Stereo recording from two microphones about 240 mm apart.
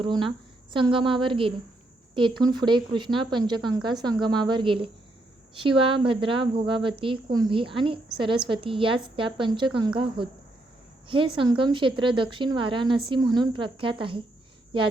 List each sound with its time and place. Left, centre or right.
0.0 s a woman's voice: right
11.3 s a woman's voice: right